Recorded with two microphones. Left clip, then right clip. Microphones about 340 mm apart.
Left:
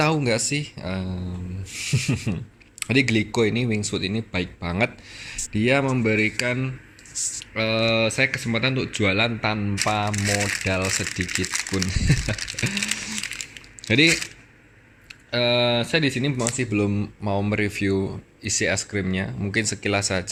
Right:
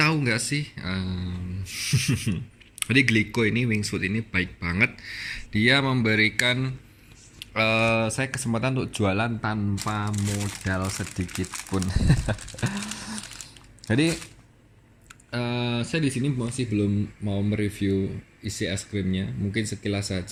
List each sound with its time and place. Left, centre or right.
0.0 s speech: centre
10.9 s speech: centre
12.0 s a sound: centre
15.3 s speech: centre
16.8 s speech: left
17.5 s speech: centre